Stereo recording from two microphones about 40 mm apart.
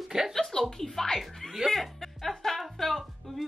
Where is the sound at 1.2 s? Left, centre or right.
Centre.